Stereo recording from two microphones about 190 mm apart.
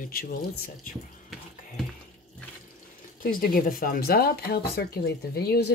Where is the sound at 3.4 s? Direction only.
50° left (ahead or behind).